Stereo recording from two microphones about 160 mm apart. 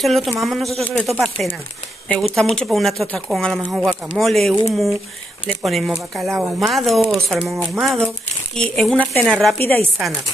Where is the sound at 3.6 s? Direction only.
10° right (ahead or behind).